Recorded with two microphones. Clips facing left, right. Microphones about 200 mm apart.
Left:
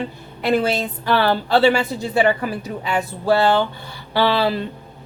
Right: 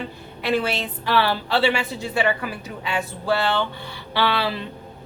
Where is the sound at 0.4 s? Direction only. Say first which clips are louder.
Left 4 dB; 45° left (ahead or behind).